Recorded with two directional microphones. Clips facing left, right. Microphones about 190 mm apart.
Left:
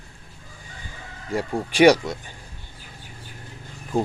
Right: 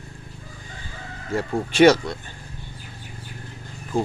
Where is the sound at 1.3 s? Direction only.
10° left (ahead or behind).